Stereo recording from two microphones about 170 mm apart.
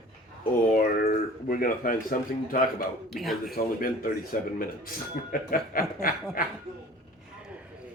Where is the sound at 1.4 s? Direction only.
55° left (ahead or behind).